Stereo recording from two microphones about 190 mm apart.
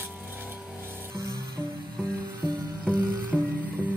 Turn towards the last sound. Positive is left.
turn(degrees=-10)  # may be behind; listen again after turning